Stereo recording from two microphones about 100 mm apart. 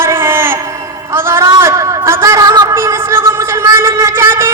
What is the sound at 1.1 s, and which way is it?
A man's voice, 25° right (ahead or behind).